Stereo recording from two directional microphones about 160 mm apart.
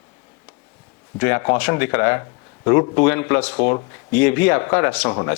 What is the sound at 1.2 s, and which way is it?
Speech, 10° left (ahead or behind).